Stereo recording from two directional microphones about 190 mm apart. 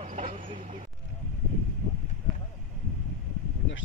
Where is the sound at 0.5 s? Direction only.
45° right (ahead or behind).